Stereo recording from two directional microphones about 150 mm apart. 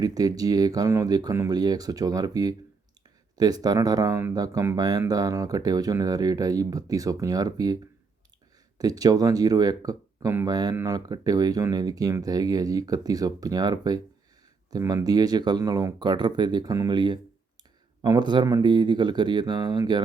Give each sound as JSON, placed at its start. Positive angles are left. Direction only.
{"t": 0.0, "sound": "speech", "side_deg": -25}
{"t": 8.8, "sound": "speech", "side_deg": -25}